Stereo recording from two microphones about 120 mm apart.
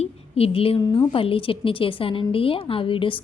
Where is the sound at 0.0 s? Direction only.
55° left (ahead or behind).